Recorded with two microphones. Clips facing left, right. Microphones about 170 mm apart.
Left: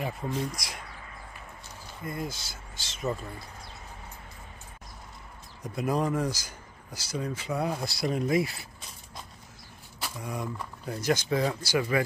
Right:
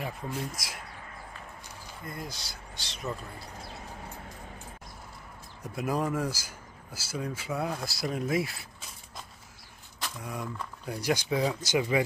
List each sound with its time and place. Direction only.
0.0 s speech: centre (ahead or behind)
2.0 s speech: centre (ahead or behind)
5.6 s speech: 5° right (ahead or behind)
9.9 s speech: 5° left (ahead or behind)
10.9 s speech: 10° right (ahead or behind)